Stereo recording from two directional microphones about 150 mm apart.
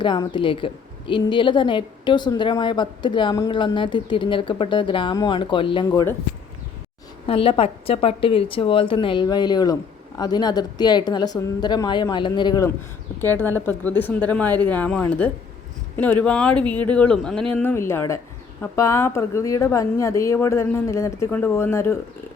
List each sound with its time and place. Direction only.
0.0 s a woman's voice: 30° left (ahead or behind)
5.9 s a woman's voice: 20° left (ahead or behind)
7.3 s a woman's voice: 35° left (ahead or behind)
13.2 s a woman's voice: 15° left (ahead or behind)